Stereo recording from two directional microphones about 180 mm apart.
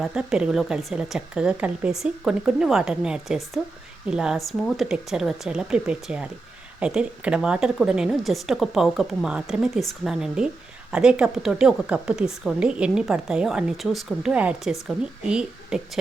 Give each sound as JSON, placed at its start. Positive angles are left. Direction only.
{"t": 0.0, "sound": "a woman's voice", "side_deg": -5}